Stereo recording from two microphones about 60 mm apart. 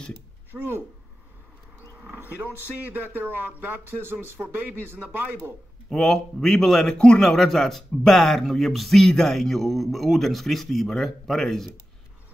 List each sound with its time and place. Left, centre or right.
0.5 s speech: centre
2.4 s speech: right
5.9 s a man's voice: centre